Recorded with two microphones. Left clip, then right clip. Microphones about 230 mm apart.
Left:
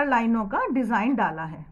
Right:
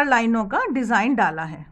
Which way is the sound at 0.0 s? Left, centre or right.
Right.